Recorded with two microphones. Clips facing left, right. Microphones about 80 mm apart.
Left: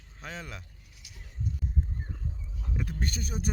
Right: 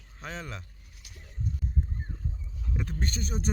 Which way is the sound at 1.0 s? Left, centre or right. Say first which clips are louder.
Right 1 dB; right.